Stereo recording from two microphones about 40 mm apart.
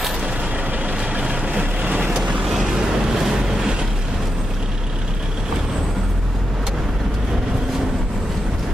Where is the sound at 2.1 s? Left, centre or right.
Right.